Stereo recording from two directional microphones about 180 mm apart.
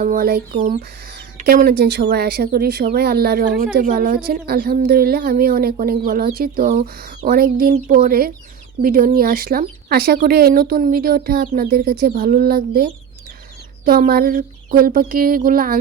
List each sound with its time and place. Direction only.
0.0 s speech: 50° right (ahead or behind)
1.5 s speech: 55° right (ahead or behind)